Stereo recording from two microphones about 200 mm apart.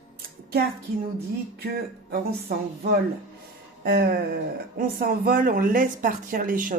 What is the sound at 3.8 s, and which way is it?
Speech, 50° right (ahead or behind).